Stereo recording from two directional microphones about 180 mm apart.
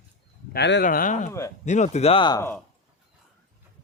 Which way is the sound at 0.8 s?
50° left (ahead or behind).